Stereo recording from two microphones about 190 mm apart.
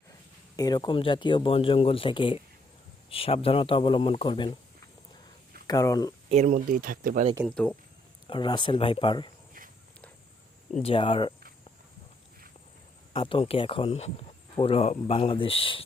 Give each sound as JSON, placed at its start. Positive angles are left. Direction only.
{"t": 0.5, "sound": "speech", "side_deg": 20}
{"t": 5.6, "sound": "speech", "side_deg": 20}
{"t": 6.2, "sound": "speech", "side_deg": -40}
{"t": 7.4, "sound": "speech", "side_deg": 5}
{"t": 8.3, "sound": "speech", "side_deg": 25}
{"t": 10.8, "sound": "speech", "side_deg": 30}
{"t": 13.1, "sound": "speech", "side_deg": 25}